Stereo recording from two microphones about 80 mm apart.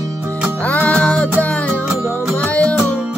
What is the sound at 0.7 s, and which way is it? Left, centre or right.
Music, centre.